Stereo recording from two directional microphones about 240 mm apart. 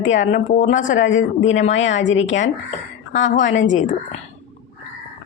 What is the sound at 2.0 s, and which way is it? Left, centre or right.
A woman's voice, left.